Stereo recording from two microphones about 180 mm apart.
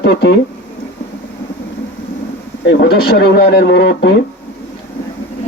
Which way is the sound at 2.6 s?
60° left (ahead or behind).